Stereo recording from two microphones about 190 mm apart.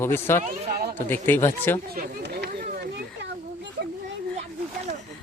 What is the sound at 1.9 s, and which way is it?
Chatter, 50° right (ahead or behind).